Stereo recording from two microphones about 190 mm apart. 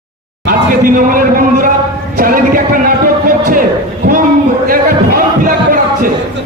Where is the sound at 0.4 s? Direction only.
50° right (ahead or behind).